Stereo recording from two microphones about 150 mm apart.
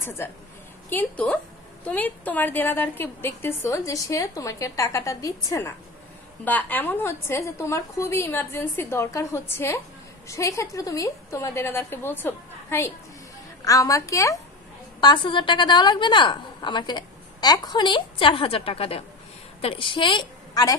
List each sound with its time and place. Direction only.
0.2 s a woman's voice: 15° left (ahead or behind)
15.0 s a woman's voice: 30° left (ahead or behind)